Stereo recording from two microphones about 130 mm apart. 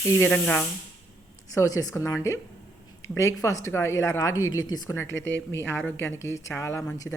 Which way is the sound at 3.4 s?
20° left (ahead or behind).